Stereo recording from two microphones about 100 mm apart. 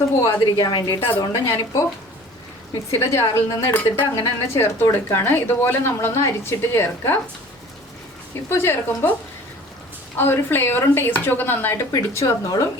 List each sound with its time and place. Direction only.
0.4 s a woman's voice: 45° left (ahead or behind)
2.9 s a woman's voice: 25° left (ahead or behind)
8.4 s a woman's voice: 25° left (ahead or behind)
10.2 s a woman's voice: 20° left (ahead or behind)
11.9 s speech: 30° left (ahead or behind)